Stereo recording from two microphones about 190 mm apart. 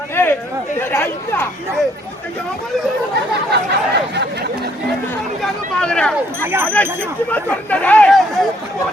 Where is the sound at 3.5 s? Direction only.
60° right (ahead or behind).